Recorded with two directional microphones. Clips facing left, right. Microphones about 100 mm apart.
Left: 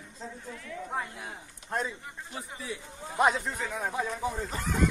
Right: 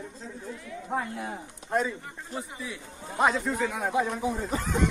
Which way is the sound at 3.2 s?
Centre (ahead or behind).